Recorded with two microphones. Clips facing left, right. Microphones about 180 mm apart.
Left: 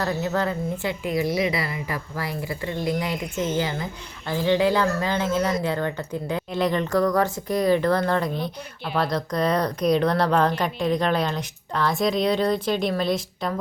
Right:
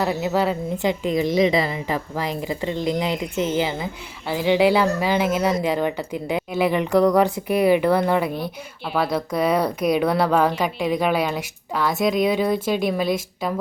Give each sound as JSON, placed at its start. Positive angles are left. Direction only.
{"t": 0.0, "sound": "speech", "side_deg": -15}
{"t": 1.0, "sound": "a woman's voice", "side_deg": -25}